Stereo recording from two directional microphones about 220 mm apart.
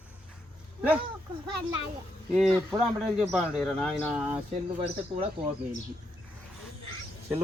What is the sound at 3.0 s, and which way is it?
Speech, 5° right (ahead or behind).